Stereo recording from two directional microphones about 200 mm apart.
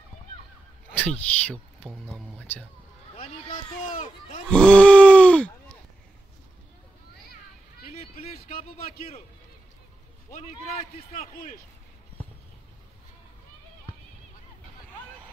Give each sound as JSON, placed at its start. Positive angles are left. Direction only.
{"t": 0.9, "sound": "speech", "side_deg": 5}
{"t": 1.9, "sound": "groan", "side_deg": -5}
{"t": 3.2, "sound": "speech", "side_deg": 35}
{"t": 4.5, "sound": "groan", "side_deg": 5}
{"t": 7.8, "sound": "a sound", "side_deg": 30}
{"t": 11.3, "sound": "speech", "side_deg": 50}